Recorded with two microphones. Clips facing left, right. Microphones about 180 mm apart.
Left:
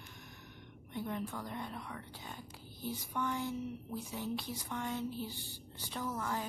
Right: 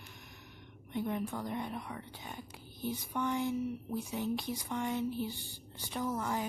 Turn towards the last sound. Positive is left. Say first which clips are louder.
# right 3 dB
turn(degrees=-20)  # may be behind; listen again after turning